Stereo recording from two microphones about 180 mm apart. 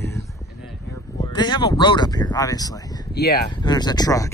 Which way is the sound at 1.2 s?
25° left (ahead or behind).